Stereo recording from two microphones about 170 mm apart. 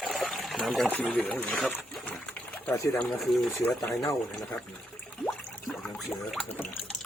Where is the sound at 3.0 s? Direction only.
Centre (ahead or behind).